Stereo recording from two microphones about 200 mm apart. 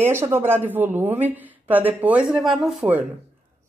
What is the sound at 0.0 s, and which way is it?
A woman's voice, 10° right (ahead or behind).